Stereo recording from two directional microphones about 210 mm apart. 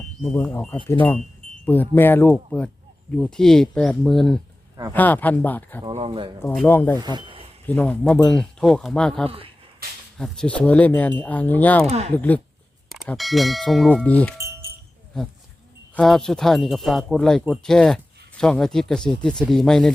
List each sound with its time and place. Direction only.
0.2 s speech: 5° left (ahead or behind)
5.8 s speech: 25° right (ahead or behind)
6.4 s speech: 10° left (ahead or behind)
7.0 s speech: 20° right (ahead or behind)
7.7 s speech: 5° left (ahead or behind)
11.9 s speech: 30° right (ahead or behind)
12.1 s speech: 10° left (ahead or behind)
14.3 s music: 10° right (ahead or behind)
15.1 s speech: 5° left (ahead or behind)